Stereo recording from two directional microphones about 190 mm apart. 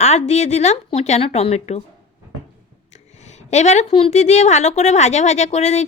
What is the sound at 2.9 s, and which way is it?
A woman's voice, 35° left (ahead or behind).